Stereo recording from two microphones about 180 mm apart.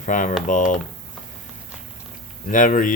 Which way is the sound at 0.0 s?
45° left (ahead or behind).